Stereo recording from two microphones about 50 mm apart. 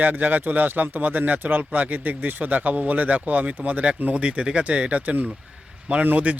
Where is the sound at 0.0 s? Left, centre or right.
Right.